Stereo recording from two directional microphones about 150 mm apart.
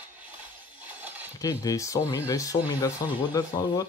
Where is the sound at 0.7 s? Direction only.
10° right (ahead or behind).